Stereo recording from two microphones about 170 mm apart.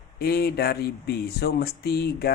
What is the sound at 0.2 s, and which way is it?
Speech, 65° left (ahead or behind).